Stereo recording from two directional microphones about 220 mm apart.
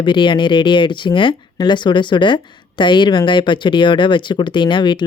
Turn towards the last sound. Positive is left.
turn(degrees=20)  # may be behind; listen again after turning